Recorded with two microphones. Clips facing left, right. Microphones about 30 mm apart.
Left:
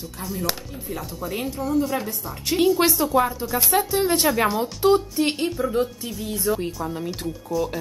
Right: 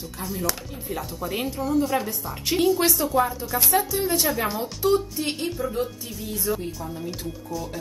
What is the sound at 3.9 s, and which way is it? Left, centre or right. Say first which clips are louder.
Speech: left 3 dB; left.